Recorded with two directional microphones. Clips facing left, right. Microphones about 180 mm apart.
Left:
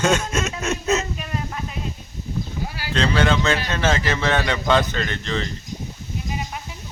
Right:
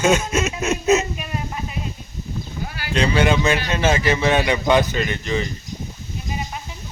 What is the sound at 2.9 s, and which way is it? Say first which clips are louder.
Speech: right 2 dB; 15° right (ahead or behind).